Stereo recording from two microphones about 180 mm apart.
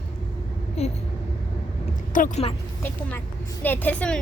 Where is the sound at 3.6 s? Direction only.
10° left (ahead or behind).